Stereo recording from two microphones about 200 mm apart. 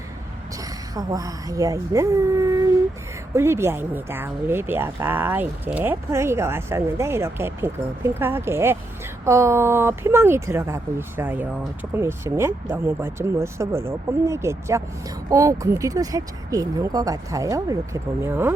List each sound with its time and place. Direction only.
0.9 s speech: 15° right (ahead or behind)